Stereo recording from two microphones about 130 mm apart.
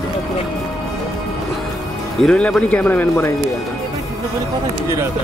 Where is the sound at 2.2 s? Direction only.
5° left (ahead or behind).